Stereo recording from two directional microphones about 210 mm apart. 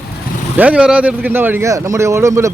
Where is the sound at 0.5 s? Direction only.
5° right (ahead or behind).